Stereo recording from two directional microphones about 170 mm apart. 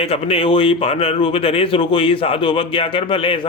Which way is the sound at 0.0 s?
35° left (ahead or behind).